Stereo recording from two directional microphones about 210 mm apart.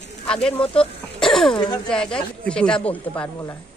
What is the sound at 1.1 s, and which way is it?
Throat clearing, centre (ahead or behind).